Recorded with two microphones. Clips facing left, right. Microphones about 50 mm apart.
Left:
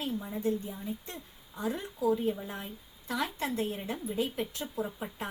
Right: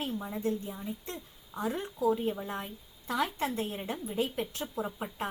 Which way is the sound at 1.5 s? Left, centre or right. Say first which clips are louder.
Right 1 dB; right.